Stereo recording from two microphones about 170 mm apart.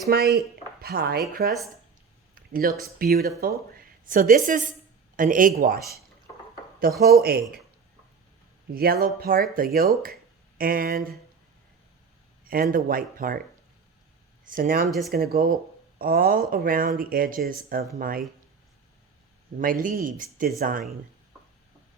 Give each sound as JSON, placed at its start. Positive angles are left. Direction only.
{"t": 0.1, "sound": "speech", "side_deg": -70}
{"t": 2.3, "sound": "a sound", "side_deg": -60}
{"t": 3.0, "sound": "a woman's voice", "side_deg": -65}
{"t": 7.0, "sound": "speech", "side_deg": -65}
{"t": 8.7, "sound": "speech", "side_deg": -60}
{"t": 12.7, "sound": "speech", "side_deg": -55}
{"t": 14.4, "sound": "speech", "side_deg": -55}
{"t": 14.8, "sound": "speech", "side_deg": 0}
{"t": 15.1, "sound": "speech", "side_deg": -60}
{"t": 19.5, "sound": "speech", "side_deg": -55}